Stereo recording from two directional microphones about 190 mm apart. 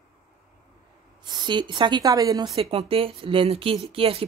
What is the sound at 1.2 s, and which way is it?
Speech, 25° right (ahead or behind).